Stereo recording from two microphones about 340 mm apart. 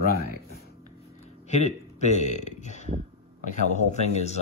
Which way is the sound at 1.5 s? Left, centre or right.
Centre.